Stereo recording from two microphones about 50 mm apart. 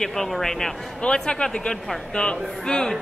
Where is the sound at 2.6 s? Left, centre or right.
Centre.